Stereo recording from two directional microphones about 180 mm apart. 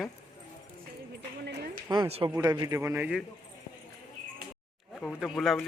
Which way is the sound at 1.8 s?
25° right (ahead or behind).